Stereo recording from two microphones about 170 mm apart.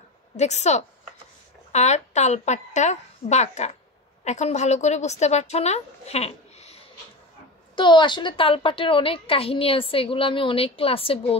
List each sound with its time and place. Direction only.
0.4 s a woman's voice: 40° left (ahead or behind)
7.7 s a woman's voice: 25° left (ahead or behind)